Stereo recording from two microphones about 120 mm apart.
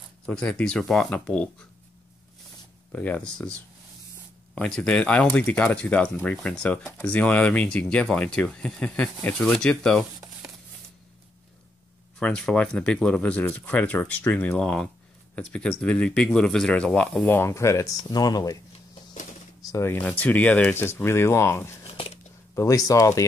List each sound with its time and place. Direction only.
0.3 s speech: 10° left (ahead or behind)
2.9 s speech: 15° left (ahead or behind)
4.6 s speech: 5° left (ahead or behind)
12.2 s speech: 5° left (ahead or behind)
17.4 s speech: 25° left (ahead or behind)
19.7 s speech: 20° left (ahead or behind)
21.8 s a sound: 50° left (ahead or behind)
22.5 s speech: 25° left (ahead or behind)